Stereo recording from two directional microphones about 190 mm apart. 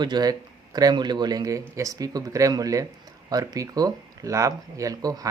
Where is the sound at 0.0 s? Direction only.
20° right (ahead or behind).